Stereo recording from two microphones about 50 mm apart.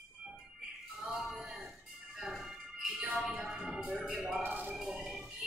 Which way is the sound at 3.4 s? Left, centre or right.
Centre.